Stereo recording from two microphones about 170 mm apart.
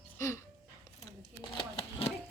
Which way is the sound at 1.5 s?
35° left (ahead or behind).